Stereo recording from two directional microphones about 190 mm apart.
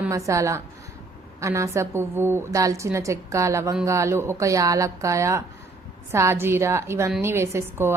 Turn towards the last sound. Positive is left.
turn(degrees=-15)  # may be behind; listen again after turning